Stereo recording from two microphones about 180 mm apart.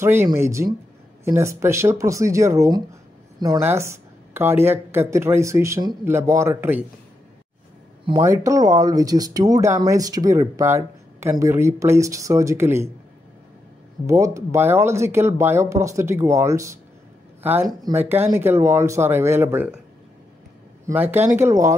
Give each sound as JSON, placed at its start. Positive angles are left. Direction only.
{"t": 0.0, "sound": "speech", "side_deg": -15}
{"t": 8.1, "sound": "speech", "side_deg": -20}
{"t": 14.0, "sound": "speech", "side_deg": -15}
{"t": 20.8, "sound": "speech", "side_deg": -10}